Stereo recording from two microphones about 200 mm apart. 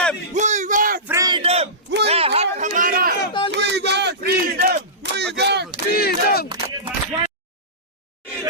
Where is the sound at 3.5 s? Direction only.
55° right (ahead or behind).